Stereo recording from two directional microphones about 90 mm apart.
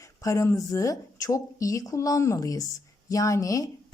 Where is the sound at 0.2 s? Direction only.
35° left (ahead or behind).